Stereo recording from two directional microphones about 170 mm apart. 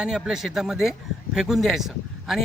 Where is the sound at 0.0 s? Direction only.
5° right (ahead or behind).